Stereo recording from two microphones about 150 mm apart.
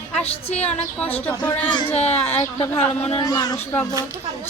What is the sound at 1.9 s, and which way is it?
A child's voice, 45° left (ahead or behind).